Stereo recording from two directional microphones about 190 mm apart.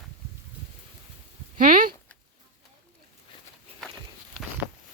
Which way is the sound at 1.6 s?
45° right (ahead or behind).